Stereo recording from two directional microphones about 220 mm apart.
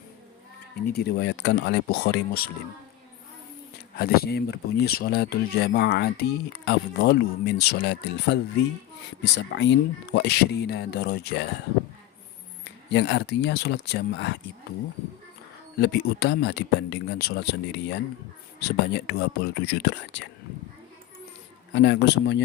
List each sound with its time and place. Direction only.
0.9 s speech: 50° left (ahead or behind)
3.9 s speech: 45° left (ahead or behind)
12.9 s speech: 55° left (ahead or behind)
15.8 s speech: 45° left (ahead or behind)
21.7 s speech: 55° left (ahead or behind)